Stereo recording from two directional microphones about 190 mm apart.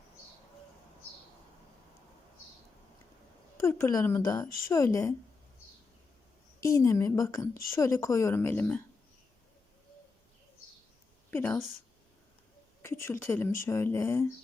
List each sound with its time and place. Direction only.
3.6 s speech: 15° left (ahead or behind)
6.6 s speech: 15° left (ahead or behind)
11.3 s a woman's voice: 10° left (ahead or behind)
12.8 s speech: 15° left (ahead or behind)